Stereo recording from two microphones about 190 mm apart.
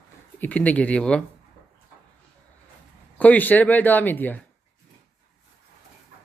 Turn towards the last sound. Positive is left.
turn(degrees=10)  # may be behind; listen again after turning